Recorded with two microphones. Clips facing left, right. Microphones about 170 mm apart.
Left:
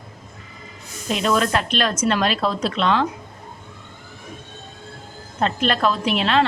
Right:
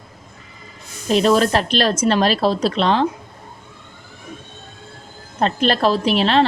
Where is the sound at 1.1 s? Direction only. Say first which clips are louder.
Right 5 dB; 35° right (ahead or behind).